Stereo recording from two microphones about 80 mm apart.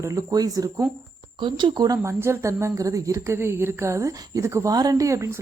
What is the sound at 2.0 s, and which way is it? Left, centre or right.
Speech, right.